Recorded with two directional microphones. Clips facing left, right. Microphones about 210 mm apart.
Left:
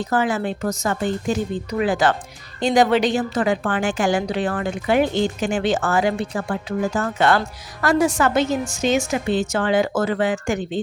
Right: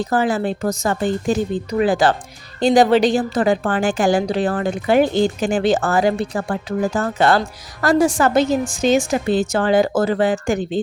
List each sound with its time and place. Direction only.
0.0 s a woman's voice: 35° right (ahead or behind)